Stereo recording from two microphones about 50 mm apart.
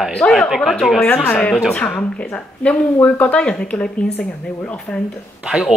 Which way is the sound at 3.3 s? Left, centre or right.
Left.